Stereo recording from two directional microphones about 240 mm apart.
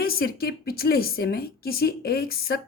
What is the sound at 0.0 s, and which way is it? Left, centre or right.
A woman's voice, left.